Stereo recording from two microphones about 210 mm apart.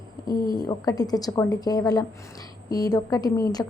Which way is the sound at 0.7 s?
20° left (ahead or behind).